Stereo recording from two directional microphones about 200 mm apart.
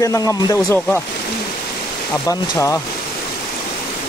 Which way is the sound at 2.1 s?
15° left (ahead or behind).